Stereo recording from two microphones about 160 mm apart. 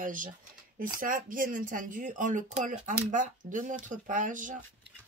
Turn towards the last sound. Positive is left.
turn(degrees=-55)  # may be behind; listen again after turning